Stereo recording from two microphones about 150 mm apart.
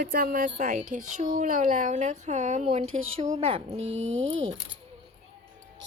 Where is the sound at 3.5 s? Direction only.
35° right (ahead or behind).